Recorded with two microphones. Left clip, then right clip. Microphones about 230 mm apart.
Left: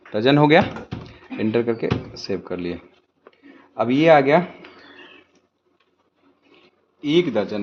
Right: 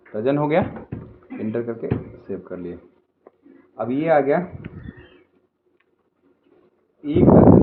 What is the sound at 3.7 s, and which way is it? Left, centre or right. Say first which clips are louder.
Speech: left 4 dB; left.